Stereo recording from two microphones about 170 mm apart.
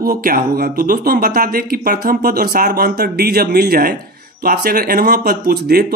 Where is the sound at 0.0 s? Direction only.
60° right (ahead or behind).